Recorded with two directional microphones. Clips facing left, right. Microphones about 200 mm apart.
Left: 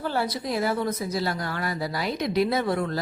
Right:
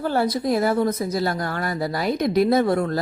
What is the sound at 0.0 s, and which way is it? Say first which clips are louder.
Speech: right 6 dB; 45° right (ahead or behind).